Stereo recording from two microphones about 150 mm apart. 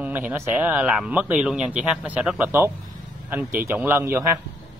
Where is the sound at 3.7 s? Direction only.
15° right (ahead or behind).